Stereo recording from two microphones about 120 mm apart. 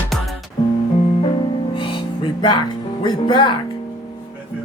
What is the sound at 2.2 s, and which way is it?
Music, 40° left (ahead or behind).